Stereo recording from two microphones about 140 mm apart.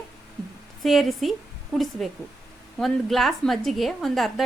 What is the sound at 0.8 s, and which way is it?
A woman's voice, centre (ahead or behind).